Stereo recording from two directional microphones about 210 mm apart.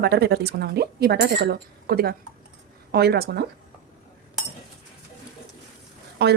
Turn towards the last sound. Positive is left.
turn(degrees=-50)  # may be behind; listen again after turning